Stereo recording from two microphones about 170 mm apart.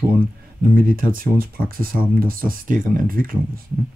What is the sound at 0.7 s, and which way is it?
Speech, 55° right (ahead or behind).